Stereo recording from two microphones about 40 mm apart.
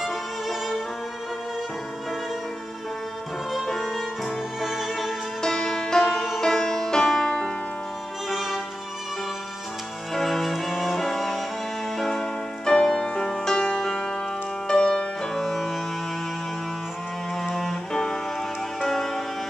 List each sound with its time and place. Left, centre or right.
0.0 s violin: centre
3.5 s violin: centre
4.6 s music: centre
5.4 s music: centre
8.3 s music: centre
10.1 s cello: centre
11.0 s music: centre
12.0 s music: centre
17.4 s music: centre